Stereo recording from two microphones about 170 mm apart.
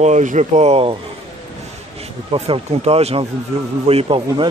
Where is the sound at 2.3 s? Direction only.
35° right (ahead or behind).